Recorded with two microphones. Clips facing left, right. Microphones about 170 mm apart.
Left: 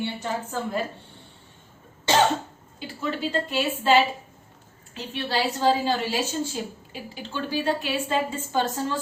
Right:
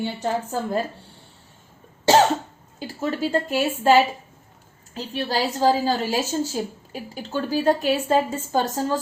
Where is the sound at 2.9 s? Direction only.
45° right (ahead or behind).